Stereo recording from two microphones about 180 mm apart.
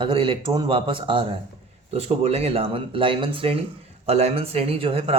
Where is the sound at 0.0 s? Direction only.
30° right (ahead or behind).